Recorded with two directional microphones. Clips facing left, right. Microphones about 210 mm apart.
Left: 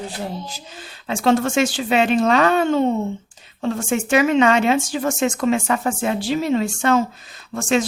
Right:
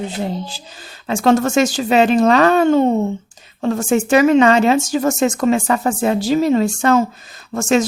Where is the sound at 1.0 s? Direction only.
45° right (ahead or behind).